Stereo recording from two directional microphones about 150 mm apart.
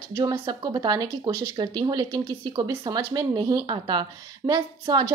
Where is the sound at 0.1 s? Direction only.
25° right (ahead or behind).